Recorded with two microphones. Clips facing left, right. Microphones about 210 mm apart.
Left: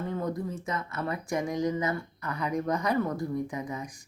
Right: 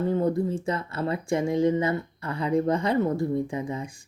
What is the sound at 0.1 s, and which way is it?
Speech, 30° right (ahead or behind).